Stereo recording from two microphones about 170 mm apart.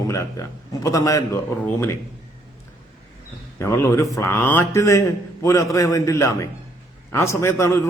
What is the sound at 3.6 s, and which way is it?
A man's voice, 15° left (ahead or behind).